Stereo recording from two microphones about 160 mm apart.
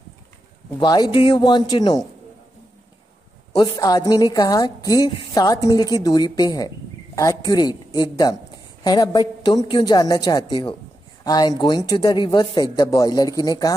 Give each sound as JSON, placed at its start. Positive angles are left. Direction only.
{"t": 0.7, "sound": "speech", "side_deg": 25}
{"t": 3.5, "sound": "speech", "side_deg": 25}